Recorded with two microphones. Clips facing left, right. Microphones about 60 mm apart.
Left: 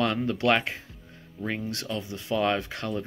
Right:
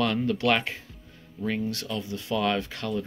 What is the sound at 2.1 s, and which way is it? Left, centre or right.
Speech, left.